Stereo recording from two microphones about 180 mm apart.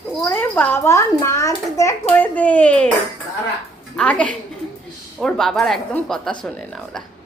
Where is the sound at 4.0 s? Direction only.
5° left (ahead or behind).